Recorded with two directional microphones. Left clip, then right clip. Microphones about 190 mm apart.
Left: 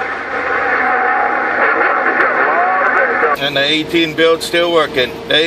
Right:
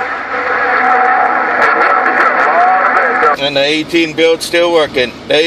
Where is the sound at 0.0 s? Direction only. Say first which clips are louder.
Right 2 dB; 40° right (ahead or behind).